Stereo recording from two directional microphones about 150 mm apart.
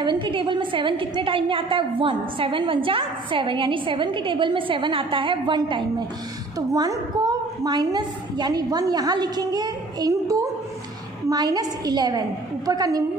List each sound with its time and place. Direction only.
0.0 s a woman's voice: 30° right (ahead or behind)